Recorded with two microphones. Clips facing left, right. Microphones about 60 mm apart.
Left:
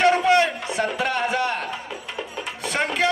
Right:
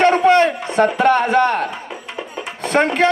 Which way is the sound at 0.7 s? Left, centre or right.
Right.